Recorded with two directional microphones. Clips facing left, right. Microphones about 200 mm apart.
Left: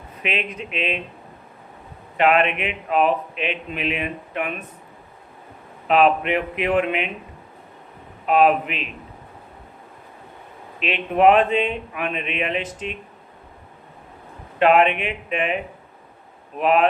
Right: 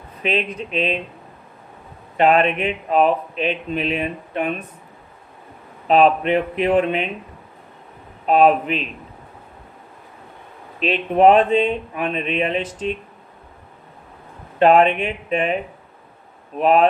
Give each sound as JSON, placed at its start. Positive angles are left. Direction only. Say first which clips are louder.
{"t": 0.2, "sound": "speech", "louder": "right 5 dB", "side_deg": -35}
{"t": 2.1, "sound": "speech", "louder": "right 2 dB", "side_deg": -35}
{"t": 5.9, "sound": "speech", "louder": "right 3 dB", "side_deg": -35}
{"t": 8.3, "sound": "speech", "louder": "right 2 dB", "side_deg": -35}
{"t": 10.8, "sound": "speech", "louder": "right 3 dB", "side_deg": -35}
{"t": 14.6, "sound": "speech", "louder": "right 3 dB", "side_deg": -35}